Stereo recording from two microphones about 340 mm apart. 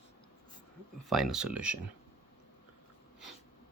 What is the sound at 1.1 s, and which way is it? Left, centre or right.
Speech, centre.